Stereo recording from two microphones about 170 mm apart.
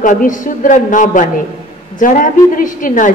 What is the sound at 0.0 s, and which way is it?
A woman's voice, 50° left (ahead or behind).